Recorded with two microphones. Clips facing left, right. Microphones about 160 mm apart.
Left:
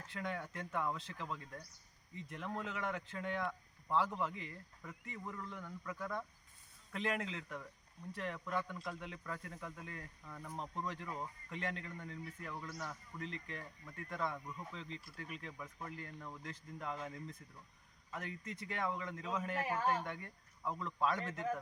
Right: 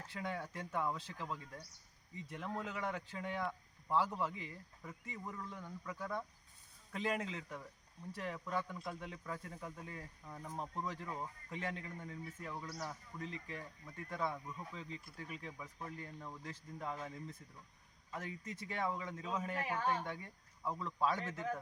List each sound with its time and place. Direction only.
0.1 s speech: 5° right (ahead or behind)
10.2 s speech: 15° right (ahead or behind)